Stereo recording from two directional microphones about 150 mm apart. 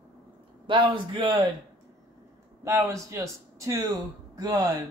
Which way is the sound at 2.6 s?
20° right (ahead or behind).